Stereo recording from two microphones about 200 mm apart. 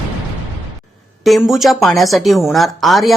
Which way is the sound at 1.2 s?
Centre (ahead or behind).